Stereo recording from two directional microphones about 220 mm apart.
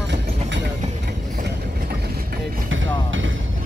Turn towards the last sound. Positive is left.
turn(degrees=-60)  # may be behind; listen again after turning